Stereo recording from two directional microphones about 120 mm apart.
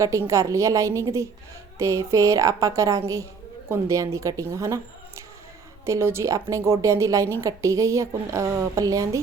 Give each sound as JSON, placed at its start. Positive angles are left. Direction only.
{"t": 0.0, "sound": "a woman's voice", "side_deg": -25}